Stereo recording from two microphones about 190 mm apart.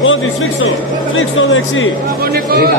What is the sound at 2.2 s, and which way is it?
Speech, 55° right (ahead or behind).